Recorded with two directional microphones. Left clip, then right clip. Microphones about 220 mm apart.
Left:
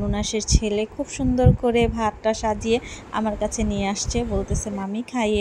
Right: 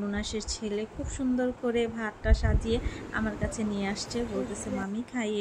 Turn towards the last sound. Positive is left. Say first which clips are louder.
# left 9 dB
turn(degrees=20)  # may be behind; listen again after turning